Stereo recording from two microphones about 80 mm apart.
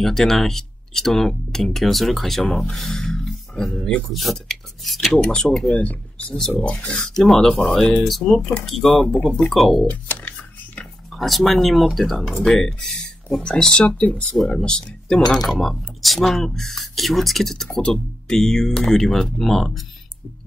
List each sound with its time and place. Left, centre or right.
0.0 s speech: centre
5.1 s speech: centre
9.8 s speech: centre
10.8 s speech: centre
14.3 s speech: centre